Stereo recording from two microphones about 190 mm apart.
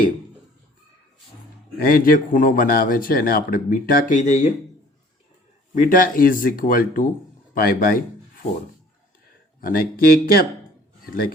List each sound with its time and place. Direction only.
1.9 s speech: 50° left (ahead or behind)
5.7 s speech: 45° left (ahead or behind)
9.6 s speech: 50° left (ahead or behind)